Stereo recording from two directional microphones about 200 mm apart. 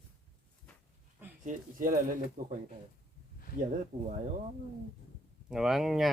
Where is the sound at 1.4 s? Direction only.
40° right (ahead or behind).